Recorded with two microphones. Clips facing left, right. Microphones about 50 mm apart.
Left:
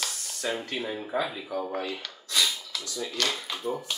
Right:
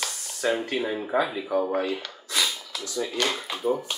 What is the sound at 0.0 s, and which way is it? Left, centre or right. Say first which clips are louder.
Speech: right 5 dB; centre.